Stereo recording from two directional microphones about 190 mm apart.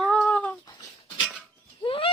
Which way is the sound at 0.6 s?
20° left (ahead or behind).